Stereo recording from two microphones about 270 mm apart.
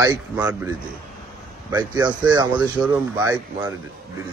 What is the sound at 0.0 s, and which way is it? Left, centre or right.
Speech, centre.